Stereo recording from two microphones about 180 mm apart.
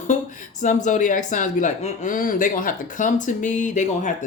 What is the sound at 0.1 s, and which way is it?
Speech, 45° left (ahead or behind).